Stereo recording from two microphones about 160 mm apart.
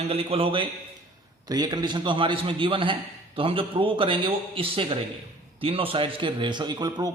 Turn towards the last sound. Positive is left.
turn(degrees=-25)  # may be behind; listen again after turning